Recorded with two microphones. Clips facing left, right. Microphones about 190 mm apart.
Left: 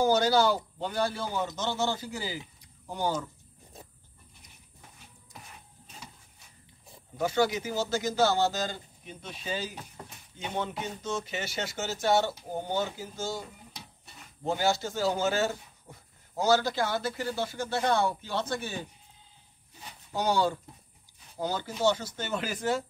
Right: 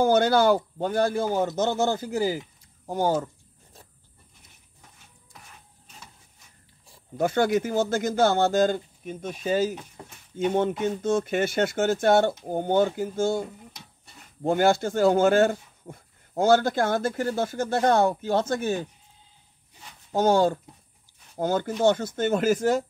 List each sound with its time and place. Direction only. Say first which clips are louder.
0.0 s speech: right 4 dB; 55° right (ahead or behind)
7.2 s speech: right 5 dB; 55° right (ahead or behind)
20.1 s speech: right 7 dB; 50° right (ahead or behind)